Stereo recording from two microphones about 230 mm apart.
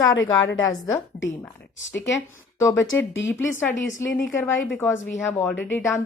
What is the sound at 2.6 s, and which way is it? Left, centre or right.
Speech, centre.